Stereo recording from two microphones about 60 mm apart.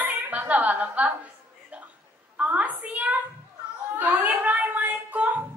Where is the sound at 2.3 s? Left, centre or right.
Right.